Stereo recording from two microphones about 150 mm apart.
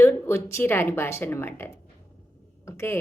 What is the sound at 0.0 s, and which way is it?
A woman's voice, 15° left (ahead or behind).